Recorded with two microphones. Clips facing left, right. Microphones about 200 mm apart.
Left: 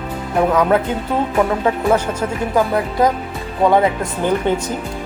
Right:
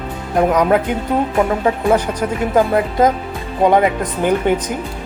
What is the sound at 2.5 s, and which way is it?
Speech, 20° right (ahead or behind).